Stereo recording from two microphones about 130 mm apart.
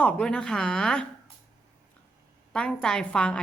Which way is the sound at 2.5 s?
5° left (ahead or behind).